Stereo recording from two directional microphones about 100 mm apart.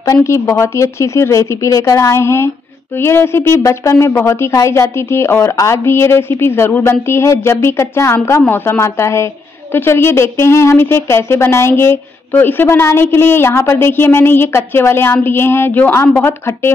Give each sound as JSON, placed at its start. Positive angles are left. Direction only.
{"t": 0.1, "sound": "a woman's voice", "side_deg": 30}